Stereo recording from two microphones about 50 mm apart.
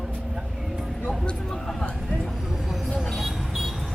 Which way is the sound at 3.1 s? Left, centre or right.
Centre.